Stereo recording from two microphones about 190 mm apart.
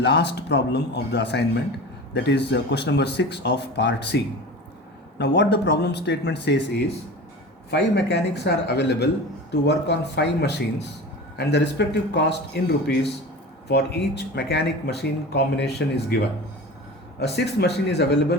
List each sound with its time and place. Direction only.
0.0 s speech: 65° left (ahead or behind)
13.7 s speech: 60° left (ahead or behind)
17.2 s speech: 60° left (ahead or behind)